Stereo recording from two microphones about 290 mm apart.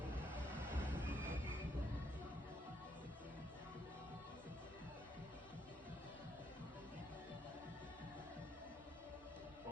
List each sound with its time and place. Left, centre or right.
0.3 s vehicle: centre
1.0 s music: centre